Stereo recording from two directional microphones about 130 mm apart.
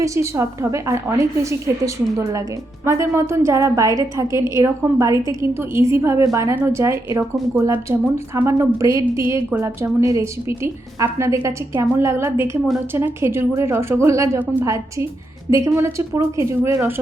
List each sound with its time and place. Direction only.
0.0 s a woman's voice: 25° right (ahead or behind)